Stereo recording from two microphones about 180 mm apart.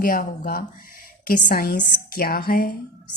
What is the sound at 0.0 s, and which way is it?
Speech, 50° left (ahead or behind).